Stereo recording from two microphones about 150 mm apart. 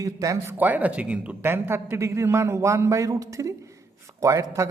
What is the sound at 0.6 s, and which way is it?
Speech, 10° right (ahead or behind).